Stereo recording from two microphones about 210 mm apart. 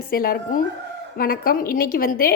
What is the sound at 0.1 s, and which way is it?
A woman's voice, 45° left (ahead or behind).